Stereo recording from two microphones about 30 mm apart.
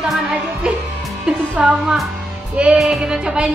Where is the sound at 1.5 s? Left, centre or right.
Right.